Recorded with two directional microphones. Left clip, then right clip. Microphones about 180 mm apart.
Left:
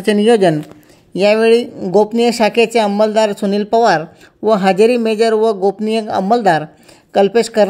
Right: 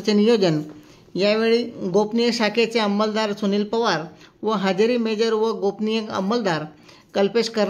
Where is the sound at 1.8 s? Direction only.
35° left (ahead or behind).